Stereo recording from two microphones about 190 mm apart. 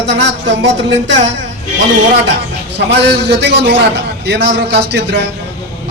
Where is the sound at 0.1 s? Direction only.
65° right (ahead or behind).